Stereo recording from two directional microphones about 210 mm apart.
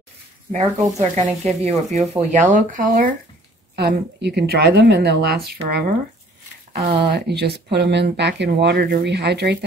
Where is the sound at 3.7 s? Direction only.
50° right (ahead or behind).